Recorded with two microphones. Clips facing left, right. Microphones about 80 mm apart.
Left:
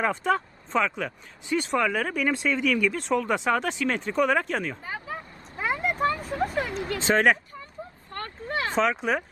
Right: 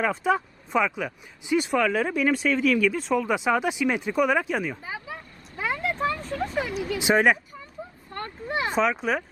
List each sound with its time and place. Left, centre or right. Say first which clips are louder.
0.0 s speech: right 1 dB; centre
5.1 s vehicle: left 2 dB; centre
5.8 s a sound: left 2 dB; centre
6.7 s speech: right 2 dB; centre
6.9 s speech: right 1 dB; centre
8.1 s a sound: right 1 dB; centre
8.7 s speech: even; centre